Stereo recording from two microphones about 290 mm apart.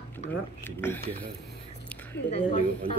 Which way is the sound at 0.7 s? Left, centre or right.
Centre.